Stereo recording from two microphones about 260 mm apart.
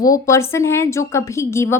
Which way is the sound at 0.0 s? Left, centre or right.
Centre.